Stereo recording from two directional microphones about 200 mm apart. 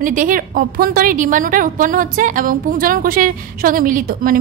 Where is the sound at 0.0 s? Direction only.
40° right (ahead or behind).